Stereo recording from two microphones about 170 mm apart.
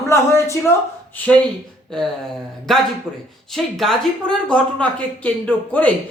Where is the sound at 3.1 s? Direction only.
10° right (ahead or behind).